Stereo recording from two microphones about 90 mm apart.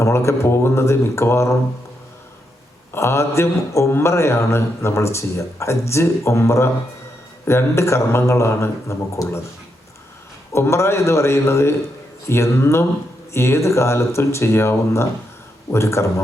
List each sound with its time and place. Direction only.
0.0 s a man's voice: 30° left (ahead or behind)
2.9 s a man's voice: 30° left (ahead or behind)
10.5 s a man's voice: 30° left (ahead or behind)